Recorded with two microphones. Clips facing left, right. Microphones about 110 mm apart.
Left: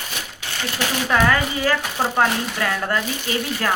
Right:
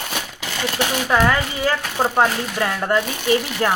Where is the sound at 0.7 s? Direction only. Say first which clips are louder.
Right 1 dB; 20° right (ahead or behind).